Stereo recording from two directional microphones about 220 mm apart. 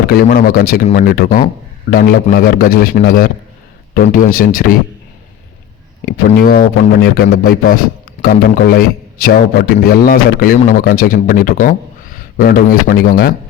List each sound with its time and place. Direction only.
0.1 s a man's voice: 45° left (ahead or behind)
6.1 s a man's voice: 40° left (ahead or behind)